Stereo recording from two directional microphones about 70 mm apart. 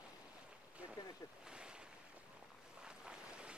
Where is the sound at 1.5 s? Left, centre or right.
Centre.